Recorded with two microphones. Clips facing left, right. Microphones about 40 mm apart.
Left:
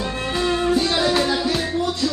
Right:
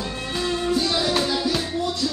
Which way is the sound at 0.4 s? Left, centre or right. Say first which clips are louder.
Left 4 dB; left.